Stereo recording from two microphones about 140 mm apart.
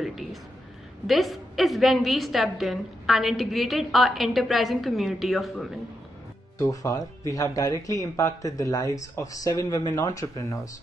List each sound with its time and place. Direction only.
0.0 s a sound: centre (ahead or behind)
1.0 s a woman's voice: centre (ahead or behind)
6.6 s speech: 25° left (ahead or behind)